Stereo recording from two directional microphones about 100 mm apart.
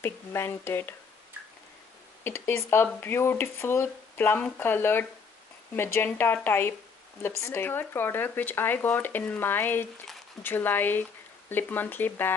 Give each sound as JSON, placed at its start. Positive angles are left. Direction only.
{"t": 0.0, "sound": "speech", "side_deg": 20}
{"t": 2.2, "sound": "speech", "side_deg": 25}